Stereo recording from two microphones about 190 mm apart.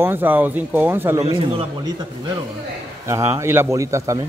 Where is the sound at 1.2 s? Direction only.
30° right (ahead or behind).